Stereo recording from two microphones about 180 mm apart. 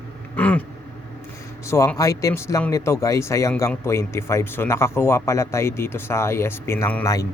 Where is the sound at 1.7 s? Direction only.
15° left (ahead or behind).